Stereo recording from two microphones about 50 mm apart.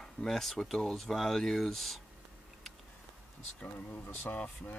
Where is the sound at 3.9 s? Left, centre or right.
Left.